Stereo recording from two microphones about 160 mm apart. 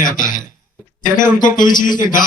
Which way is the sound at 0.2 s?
55° left (ahead or behind).